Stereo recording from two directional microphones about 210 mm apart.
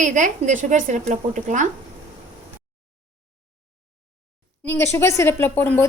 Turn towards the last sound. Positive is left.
turn(degrees=10)  # may be behind; listen again after turning